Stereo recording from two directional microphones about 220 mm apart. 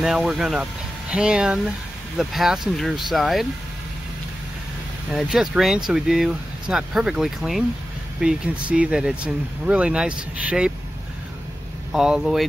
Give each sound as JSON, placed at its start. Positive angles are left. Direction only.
{"t": 0.0, "sound": "speech", "side_deg": 0}
{"t": 5.1, "sound": "speech", "side_deg": -5}
{"t": 11.9, "sound": "speech", "side_deg": -5}